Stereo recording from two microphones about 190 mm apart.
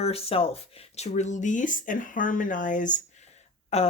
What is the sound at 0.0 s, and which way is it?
Speech, 30° left (ahead or behind).